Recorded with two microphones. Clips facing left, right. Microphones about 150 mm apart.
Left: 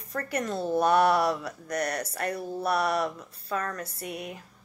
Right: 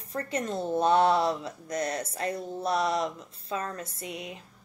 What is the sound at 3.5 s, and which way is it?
Speech, 25° right (ahead or behind).